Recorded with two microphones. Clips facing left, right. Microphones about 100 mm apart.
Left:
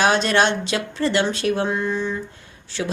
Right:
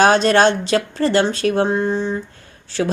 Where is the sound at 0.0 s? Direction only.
40° right (ahead or behind).